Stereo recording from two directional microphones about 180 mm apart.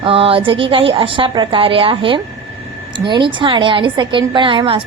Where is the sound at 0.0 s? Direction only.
30° right (ahead or behind).